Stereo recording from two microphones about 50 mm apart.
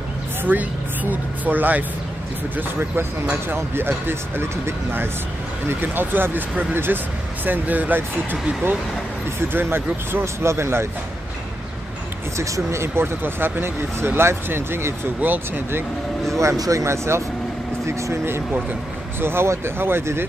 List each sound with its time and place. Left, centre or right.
0.4 s a woman's voice: right
3.4 s speech: right
5.7 s speech: right
10.2 s speech: right
12.4 s speech: right
15.2 s speech: right
16.3 s speech: right